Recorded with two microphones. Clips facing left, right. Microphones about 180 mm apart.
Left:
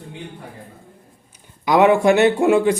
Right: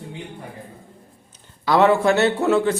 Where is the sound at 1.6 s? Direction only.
15° left (ahead or behind).